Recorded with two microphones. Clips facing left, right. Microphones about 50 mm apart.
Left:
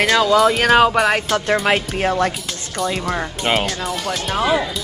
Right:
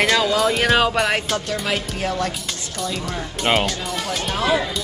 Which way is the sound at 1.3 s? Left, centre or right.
Left.